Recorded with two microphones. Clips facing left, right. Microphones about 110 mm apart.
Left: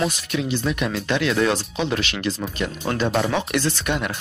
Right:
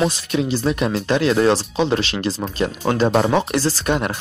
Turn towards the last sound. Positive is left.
turn(degrees=-35)  # may be behind; listen again after turning